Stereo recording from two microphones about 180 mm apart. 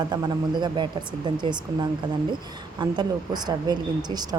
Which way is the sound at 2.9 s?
25° right (ahead or behind).